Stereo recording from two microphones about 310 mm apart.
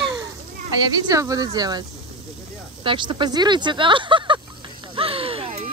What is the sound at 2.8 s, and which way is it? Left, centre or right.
Speech, centre.